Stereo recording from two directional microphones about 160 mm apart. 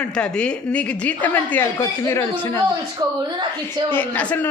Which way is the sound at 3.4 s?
25° right (ahead or behind).